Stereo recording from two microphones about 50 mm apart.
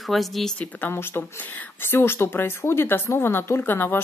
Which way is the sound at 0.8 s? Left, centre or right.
Left.